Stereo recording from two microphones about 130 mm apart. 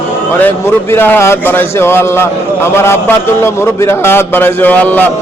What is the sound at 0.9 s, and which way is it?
A man's voice, 15° left (ahead or behind).